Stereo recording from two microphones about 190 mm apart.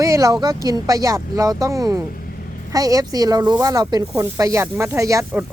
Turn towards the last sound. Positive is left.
turn(degrees=-10)  # may be behind; listen again after turning